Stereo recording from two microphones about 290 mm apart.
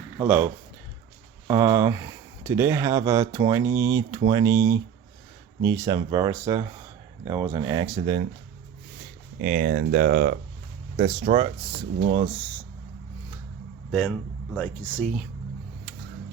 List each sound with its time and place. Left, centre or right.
0.2 s speech: centre
9.4 s speech: right
14.5 s speech: centre